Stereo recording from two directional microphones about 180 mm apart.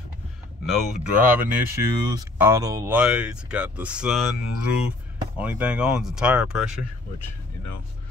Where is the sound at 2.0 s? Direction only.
20° right (ahead or behind); by 4.2 s 5° right (ahead or behind).